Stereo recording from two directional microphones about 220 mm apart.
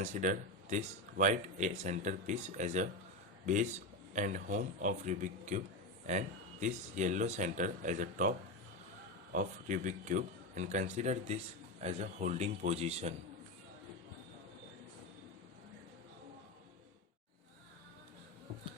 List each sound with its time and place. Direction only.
0.0 s speech: 35° right (ahead or behind)
9.3 s speech: 35° right (ahead or behind)